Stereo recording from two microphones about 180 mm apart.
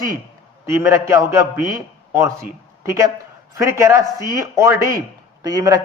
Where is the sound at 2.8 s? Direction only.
15° right (ahead or behind).